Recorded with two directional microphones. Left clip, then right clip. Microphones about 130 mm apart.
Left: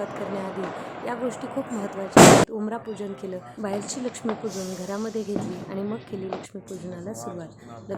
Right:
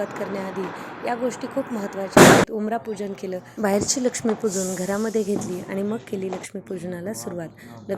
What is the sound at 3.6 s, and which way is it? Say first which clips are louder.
Speech: right 9 dB; 10° right (ahead or behind).